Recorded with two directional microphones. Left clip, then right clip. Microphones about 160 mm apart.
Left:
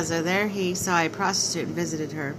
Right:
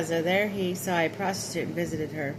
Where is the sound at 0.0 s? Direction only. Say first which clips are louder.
Left 1 dB; 10° left (ahead or behind).